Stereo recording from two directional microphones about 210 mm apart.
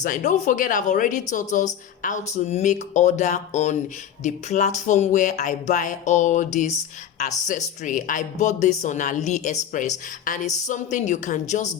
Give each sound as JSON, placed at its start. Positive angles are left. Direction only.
{"t": 0.0, "sound": "music", "side_deg": 35}